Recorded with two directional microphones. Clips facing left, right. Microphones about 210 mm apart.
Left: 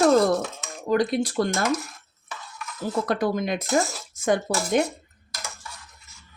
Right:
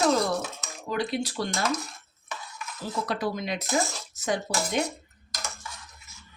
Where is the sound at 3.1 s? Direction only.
50° left (ahead or behind).